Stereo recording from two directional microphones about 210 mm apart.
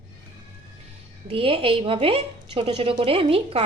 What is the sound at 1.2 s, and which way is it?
Speech, 25° right (ahead or behind).